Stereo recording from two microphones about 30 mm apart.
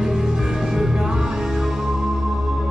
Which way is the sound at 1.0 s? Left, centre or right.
Centre.